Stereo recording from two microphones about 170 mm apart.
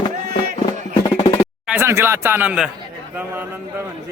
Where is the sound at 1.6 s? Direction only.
15° right (ahead or behind).